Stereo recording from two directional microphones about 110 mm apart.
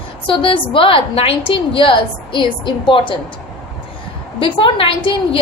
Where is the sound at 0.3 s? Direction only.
50° left (ahead or behind).